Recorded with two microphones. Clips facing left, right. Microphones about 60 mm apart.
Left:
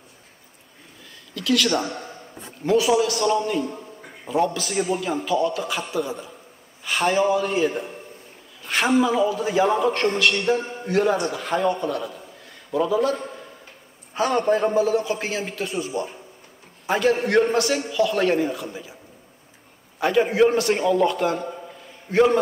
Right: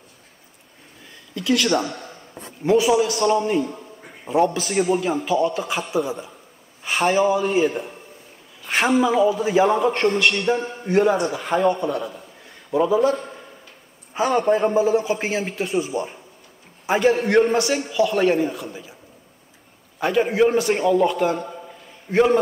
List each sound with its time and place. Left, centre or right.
1.3 s a man's voice: centre
3.5 s a sound: centre
4.6 s a man's voice: centre
20.0 s a man's voice: centre